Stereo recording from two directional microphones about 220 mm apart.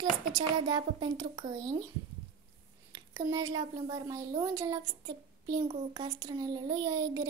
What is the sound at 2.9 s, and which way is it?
A woman's voice, 15° right (ahead or behind).